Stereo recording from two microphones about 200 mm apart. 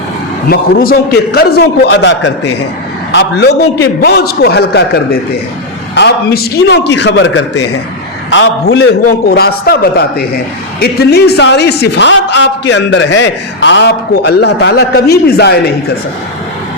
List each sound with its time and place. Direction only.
0.5 s a man's voice: 50° left (ahead or behind)